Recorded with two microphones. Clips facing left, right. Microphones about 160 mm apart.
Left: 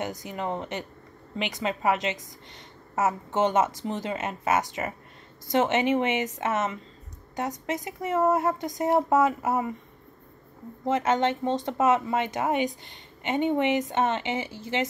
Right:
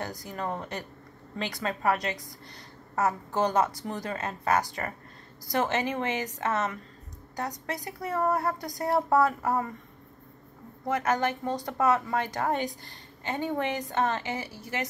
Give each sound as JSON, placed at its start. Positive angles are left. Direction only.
{"t": 0.3, "sound": "speech", "side_deg": 20}
{"t": 10.9, "sound": "speech", "side_deg": 25}